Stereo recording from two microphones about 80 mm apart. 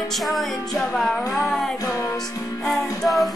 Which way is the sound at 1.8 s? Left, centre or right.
Left.